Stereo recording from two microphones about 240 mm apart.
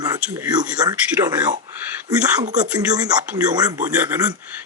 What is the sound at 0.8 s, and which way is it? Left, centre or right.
Speech, centre.